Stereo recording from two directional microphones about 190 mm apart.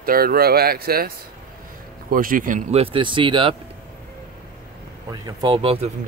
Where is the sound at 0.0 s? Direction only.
50° right (ahead or behind); by 3.5 s 25° right (ahead or behind).